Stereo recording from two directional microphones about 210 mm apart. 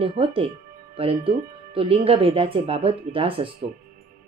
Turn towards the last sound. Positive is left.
turn(degrees=-25)  # may be behind; listen again after turning